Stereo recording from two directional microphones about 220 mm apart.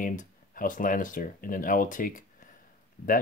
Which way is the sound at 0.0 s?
35° left (ahead or behind).